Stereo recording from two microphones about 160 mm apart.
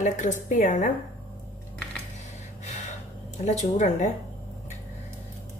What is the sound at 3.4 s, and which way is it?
Speech, 45° left (ahead or behind).